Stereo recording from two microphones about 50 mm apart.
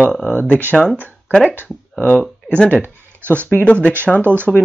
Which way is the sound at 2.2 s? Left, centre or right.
Centre.